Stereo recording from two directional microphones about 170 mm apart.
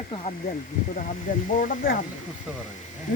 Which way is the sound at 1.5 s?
55° left (ahead or behind).